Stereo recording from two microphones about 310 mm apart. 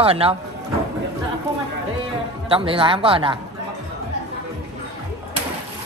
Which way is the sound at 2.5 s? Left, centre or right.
Centre.